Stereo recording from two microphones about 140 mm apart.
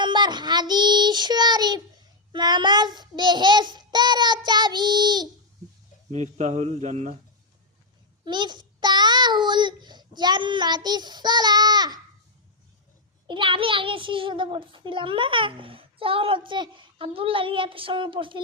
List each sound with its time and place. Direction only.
0.0 s child singing: 30° right (ahead or behind)
6.1 s speech: 55° right (ahead or behind)
8.2 s a child's voice: 30° right (ahead or behind)
13.2 s a child's voice: 35° right (ahead or behind)